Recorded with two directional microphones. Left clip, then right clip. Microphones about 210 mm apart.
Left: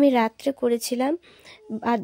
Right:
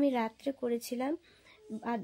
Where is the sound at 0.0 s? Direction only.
45° left (ahead or behind).